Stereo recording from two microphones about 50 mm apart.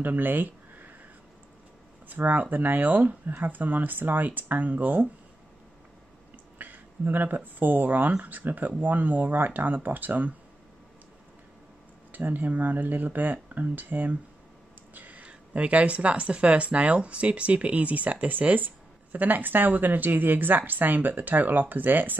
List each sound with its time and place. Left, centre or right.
0.0 s a sound: right
2.0 s a woman's voice: right
6.6 s a woman's voice: right
12.1 s a woman's voice: right
15.0 s a sound: right
15.2 s a woman's voice: right